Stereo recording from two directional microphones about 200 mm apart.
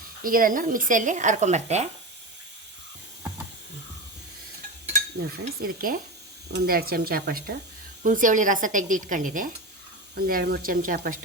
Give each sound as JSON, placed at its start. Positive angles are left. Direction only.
{"t": 0.2, "sound": "speech", "side_deg": -45}
{"t": 5.6, "sound": "speech", "side_deg": -45}